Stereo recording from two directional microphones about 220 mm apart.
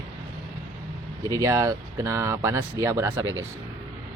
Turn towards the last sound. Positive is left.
turn(degrees=-15)  # may be behind; listen again after turning